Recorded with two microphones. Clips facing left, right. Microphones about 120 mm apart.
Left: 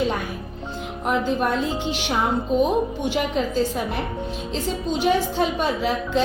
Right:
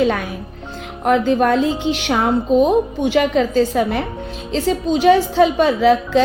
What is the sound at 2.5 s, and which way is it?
A woman's voice, 90° right.